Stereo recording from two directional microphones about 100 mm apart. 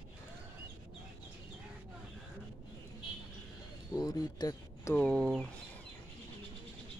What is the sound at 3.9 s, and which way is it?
Speech, 40° left (ahead or behind).